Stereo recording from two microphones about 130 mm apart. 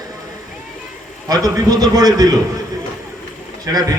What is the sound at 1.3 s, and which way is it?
A man's voice, 30° right (ahead or behind).